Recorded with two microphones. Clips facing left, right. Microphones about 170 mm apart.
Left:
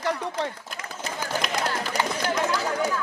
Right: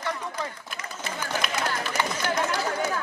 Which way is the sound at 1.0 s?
40° left (ahead or behind).